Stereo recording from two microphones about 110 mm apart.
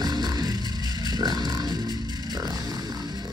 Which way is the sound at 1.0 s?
35° right (ahead or behind).